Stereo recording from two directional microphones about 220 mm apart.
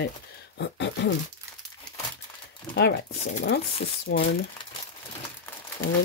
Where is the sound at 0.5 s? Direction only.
55° left (ahead or behind).